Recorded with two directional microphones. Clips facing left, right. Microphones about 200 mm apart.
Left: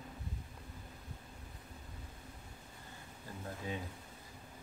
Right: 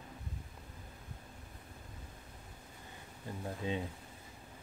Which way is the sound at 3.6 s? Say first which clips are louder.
Right 5 dB; 20° right (ahead or behind).